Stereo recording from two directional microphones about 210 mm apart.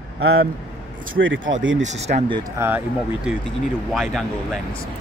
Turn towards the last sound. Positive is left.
turn(degrees=0)  # may be behind; listen again after turning